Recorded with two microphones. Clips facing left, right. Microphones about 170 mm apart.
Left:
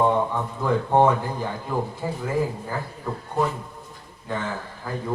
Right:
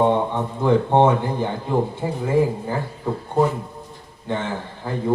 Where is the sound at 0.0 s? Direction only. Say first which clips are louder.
Right 3 dB; 25° right (ahead or behind).